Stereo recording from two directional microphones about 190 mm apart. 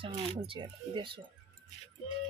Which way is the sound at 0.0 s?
25° right (ahead or behind).